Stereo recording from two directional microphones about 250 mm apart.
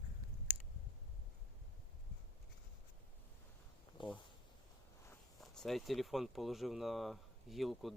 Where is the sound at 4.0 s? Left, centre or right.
Centre.